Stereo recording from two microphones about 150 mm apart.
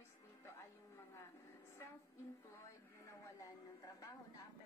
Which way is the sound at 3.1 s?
25° left (ahead or behind).